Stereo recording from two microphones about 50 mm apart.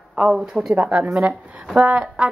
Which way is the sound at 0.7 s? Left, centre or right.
Right.